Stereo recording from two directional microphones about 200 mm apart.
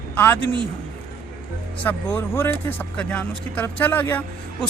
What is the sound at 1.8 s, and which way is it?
Speech, 10° left (ahead or behind).